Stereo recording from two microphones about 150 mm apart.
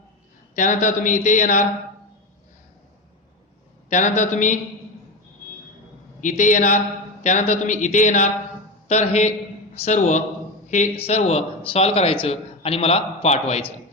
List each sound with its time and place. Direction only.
0.5 s a man's voice: 55° left (ahead or behind)
3.8 s a man's voice: 55° left (ahead or behind)
6.2 s a man's voice: 55° left (ahead or behind)